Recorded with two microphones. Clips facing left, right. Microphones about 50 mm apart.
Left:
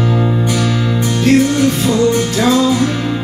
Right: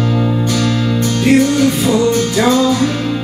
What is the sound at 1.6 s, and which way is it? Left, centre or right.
Music, centre.